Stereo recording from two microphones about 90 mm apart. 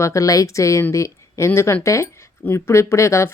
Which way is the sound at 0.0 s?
35° left (ahead or behind).